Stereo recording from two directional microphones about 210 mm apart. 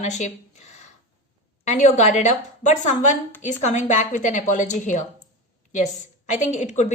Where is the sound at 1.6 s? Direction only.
35° left (ahead or behind).